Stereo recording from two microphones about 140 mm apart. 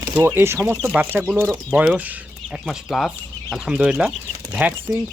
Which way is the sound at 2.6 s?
Centre (ahead or behind).